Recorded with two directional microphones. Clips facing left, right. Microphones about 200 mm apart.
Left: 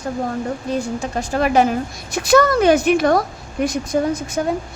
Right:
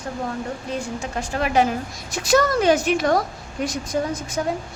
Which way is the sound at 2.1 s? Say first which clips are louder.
Left 4 dB; 60° left (ahead or behind).